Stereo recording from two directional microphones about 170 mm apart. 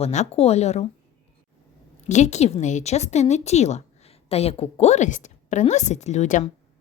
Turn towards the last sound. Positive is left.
turn(degrees=45)  # may be behind; listen again after turning